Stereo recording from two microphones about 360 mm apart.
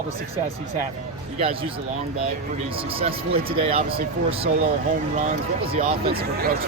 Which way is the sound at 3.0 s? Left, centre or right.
Centre.